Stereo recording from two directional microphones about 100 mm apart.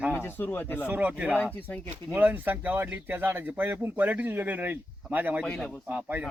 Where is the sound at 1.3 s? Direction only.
15° left (ahead or behind).